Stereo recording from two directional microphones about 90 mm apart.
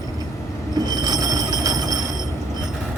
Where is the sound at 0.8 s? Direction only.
50° right (ahead or behind).